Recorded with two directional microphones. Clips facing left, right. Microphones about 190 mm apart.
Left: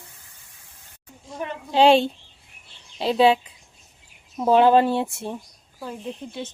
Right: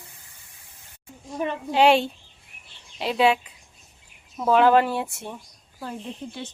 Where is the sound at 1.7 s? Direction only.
30° left (ahead or behind).